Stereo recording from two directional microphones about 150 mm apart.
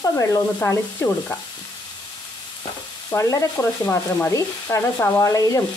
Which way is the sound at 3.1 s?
20° left (ahead or behind).